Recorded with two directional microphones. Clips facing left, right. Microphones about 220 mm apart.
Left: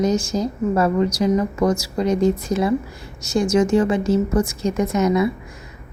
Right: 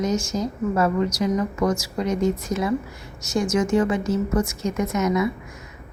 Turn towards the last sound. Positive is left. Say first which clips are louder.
# left 4 dB
turn(degrees=30)  # may be behind; listen again after turning